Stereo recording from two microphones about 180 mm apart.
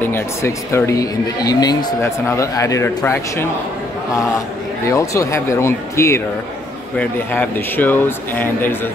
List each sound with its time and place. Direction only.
0.0 s speech: 15° left (ahead or behind)
4.9 s speech: 15° left (ahead or behind)